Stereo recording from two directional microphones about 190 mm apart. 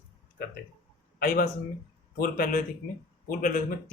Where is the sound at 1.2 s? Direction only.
50° left (ahead or behind).